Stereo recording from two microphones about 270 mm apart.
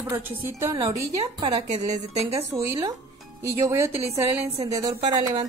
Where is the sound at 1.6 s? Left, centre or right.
Right.